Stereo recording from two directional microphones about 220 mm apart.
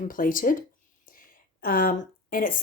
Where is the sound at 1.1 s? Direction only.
40° left (ahead or behind).